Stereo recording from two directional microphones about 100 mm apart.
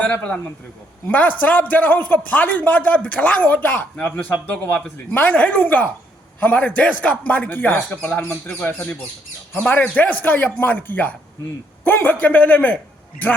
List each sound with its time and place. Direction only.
0.0 s speech: 10° left (ahead or behind)